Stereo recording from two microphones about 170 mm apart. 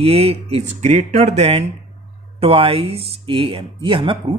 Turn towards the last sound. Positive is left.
turn(degrees=-30)  # may be behind; listen again after turning